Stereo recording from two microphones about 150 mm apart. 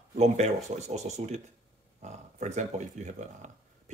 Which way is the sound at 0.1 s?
50° right (ahead or behind).